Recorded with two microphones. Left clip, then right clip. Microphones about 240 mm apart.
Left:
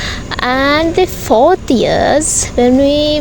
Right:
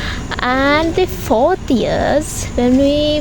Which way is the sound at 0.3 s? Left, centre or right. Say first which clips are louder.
Left 2 dB; centre.